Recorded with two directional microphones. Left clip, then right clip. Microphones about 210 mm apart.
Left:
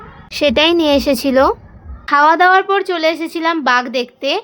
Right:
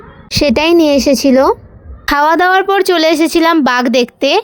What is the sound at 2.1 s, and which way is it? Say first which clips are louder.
A woman's voice: even; 40° right (ahead or behind).